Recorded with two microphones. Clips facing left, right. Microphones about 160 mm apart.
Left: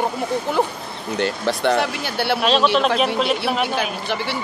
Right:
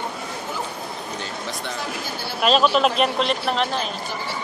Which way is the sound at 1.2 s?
70° left (ahead or behind).